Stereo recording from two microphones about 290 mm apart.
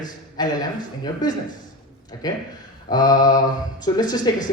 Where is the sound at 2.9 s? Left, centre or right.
Centre.